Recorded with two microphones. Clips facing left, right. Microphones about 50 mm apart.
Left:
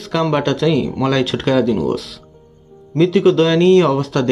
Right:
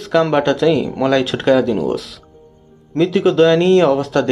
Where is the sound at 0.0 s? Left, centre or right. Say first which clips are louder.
Right 3 dB; centre.